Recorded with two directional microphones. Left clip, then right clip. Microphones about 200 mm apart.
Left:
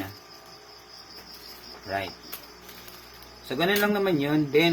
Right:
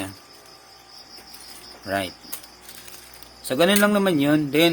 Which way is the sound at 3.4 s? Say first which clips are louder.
Right 5 dB; 65° right (ahead or behind).